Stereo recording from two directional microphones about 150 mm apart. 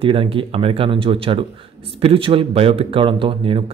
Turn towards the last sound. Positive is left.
turn(degrees=-35)  # may be behind; listen again after turning